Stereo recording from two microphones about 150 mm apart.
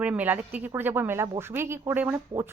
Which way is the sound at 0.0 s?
10° right (ahead or behind).